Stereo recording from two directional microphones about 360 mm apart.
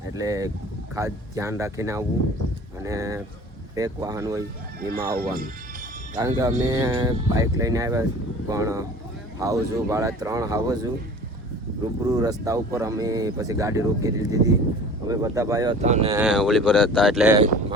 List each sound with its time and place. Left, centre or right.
0.2 s speech: centre
4.8 s speech: right
6.1 s speech: centre
12.0 s speech: centre
16.2 s speech: centre